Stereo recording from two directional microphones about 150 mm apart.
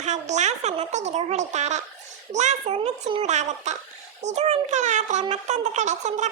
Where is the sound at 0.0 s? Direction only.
50° right (ahead or behind).